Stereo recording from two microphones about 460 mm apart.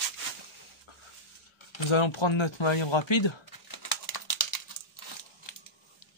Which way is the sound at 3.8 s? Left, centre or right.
Left.